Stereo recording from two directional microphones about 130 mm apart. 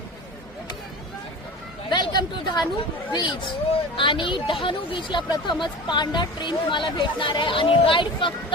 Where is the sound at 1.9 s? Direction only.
35° left (ahead or behind).